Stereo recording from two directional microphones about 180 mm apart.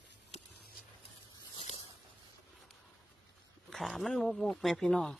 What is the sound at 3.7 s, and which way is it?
Speech, centre (ahead or behind).